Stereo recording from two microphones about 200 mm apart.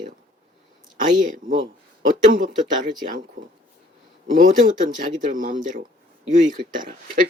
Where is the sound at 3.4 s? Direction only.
40° right (ahead or behind).